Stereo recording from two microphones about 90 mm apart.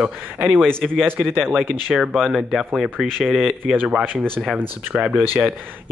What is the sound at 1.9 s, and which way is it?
Speech, centre (ahead or behind).